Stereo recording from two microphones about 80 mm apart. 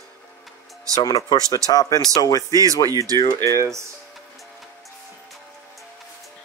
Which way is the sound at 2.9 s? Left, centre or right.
Right.